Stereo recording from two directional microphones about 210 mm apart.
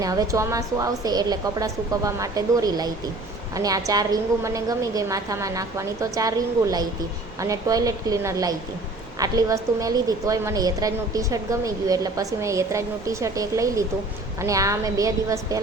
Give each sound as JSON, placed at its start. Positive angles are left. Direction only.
{"t": 0.0, "sound": "a woman's voice", "side_deg": -15}